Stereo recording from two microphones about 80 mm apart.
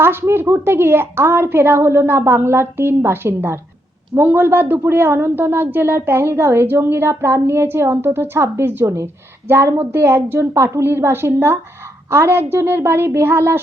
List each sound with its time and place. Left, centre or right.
0.0 s a woman's voice: right